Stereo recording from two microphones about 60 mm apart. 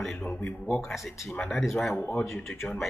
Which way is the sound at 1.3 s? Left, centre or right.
Left.